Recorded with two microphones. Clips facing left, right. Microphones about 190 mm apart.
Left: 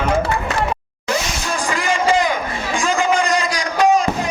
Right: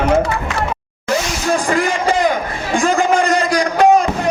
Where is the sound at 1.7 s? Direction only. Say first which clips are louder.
Left 3 dB; 55° right (ahead or behind).